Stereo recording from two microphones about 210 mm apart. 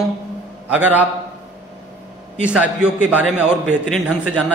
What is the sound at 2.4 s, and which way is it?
A man's voice, 5° right (ahead or behind).